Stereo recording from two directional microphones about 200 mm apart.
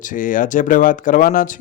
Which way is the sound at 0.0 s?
40° left (ahead or behind).